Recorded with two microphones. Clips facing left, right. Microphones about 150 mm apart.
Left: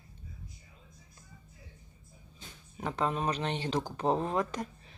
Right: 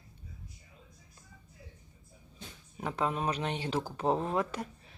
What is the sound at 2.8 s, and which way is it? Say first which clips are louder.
Speech: left 1 dB; 5° right (ahead or behind).